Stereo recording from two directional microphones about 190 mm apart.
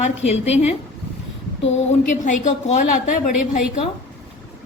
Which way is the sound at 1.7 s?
40° left (ahead or behind).